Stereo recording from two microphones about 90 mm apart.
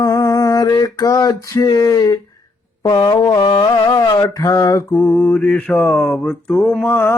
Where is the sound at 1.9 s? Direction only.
45° left (ahead or behind).